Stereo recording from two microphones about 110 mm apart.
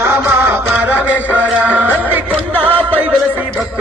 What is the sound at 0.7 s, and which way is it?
A man's voice, 15° right (ahead or behind).